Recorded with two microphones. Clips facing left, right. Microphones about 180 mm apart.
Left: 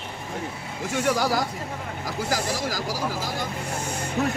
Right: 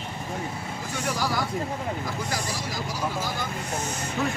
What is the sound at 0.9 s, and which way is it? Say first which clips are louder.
Speech: left 7 dB; 90° left.